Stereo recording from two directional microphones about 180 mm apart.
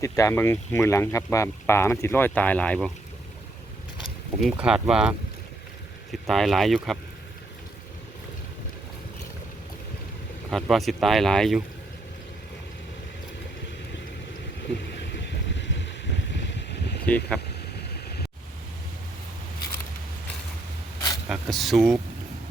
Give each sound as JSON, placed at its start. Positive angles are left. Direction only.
{"t": 0.0, "sound": "speech", "side_deg": 15}
{"t": 4.4, "sound": "speech", "side_deg": -5}
{"t": 10.5, "sound": "speech", "side_deg": 0}
{"t": 14.9, "sound": "vehicle", "side_deg": 75}
{"t": 17.1, "sound": "speech", "side_deg": 5}
{"t": 21.2, "sound": "speech", "side_deg": 0}